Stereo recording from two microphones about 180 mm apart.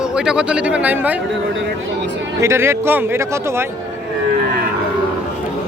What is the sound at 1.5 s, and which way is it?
Speech, 90° right.